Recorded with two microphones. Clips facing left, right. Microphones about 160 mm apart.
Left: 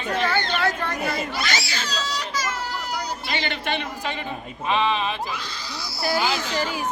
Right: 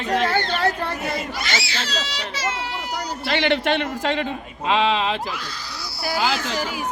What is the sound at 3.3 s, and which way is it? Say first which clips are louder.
A man's voice: right 9 dB; 75° right (ahead or behind).